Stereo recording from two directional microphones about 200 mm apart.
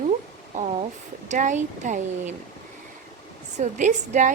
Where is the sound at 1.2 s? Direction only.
35° right (ahead or behind).